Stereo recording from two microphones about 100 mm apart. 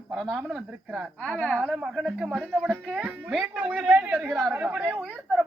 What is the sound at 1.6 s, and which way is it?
Speech, 5° right (ahead or behind).